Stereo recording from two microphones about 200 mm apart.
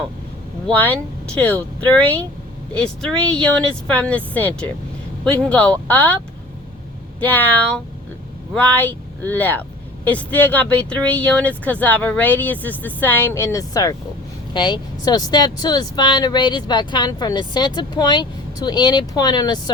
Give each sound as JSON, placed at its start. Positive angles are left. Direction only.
{"t": 0.7, "sound": "speech", "side_deg": 5}
{"t": 7.2, "sound": "speech", "side_deg": 10}